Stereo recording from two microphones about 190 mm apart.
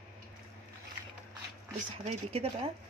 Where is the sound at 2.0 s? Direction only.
35° right (ahead or behind).